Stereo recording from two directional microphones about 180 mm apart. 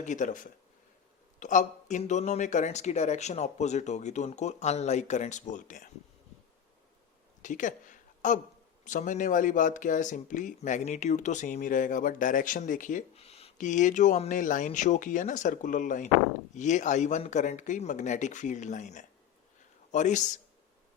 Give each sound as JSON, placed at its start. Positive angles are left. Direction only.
{"t": 0.0, "sound": "speech", "side_deg": 45}
{"t": 1.4, "sound": "speech", "side_deg": 45}
{"t": 7.4, "sound": "a sound", "side_deg": 45}
{"t": 8.8, "sound": "speech", "side_deg": 45}